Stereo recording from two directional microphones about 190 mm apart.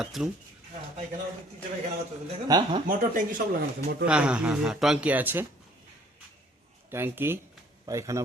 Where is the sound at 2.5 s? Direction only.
20° right (ahead or behind).